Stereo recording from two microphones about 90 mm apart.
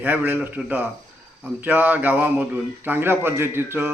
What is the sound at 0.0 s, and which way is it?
Speech, 20° right (ahead or behind).